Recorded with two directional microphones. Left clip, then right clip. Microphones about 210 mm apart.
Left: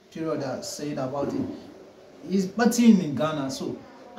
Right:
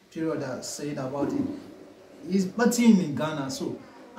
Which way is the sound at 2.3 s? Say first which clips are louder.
Left 1 dB; centre (ahead or behind).